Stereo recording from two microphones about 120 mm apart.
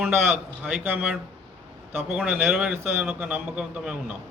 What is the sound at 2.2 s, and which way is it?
Speech, 15° right (ahead or behind).